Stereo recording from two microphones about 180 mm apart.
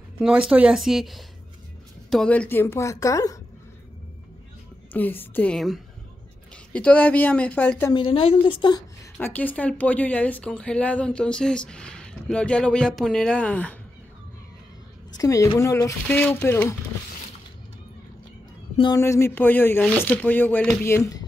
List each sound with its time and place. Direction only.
0.2 s speech: 5° right (ahead or behind); by 3.3 s 20° left (ahead or behind)
4.9 s speech: 10° left (ahead or behind)
7.9 s a woman's voice: 30° left (ahead or behind)
9.2 s speech: 10° left (ahead or behind)
15.1 s speech: 20° left (ahead or behind)
18.8 s speech: 20° left (ahead or behind)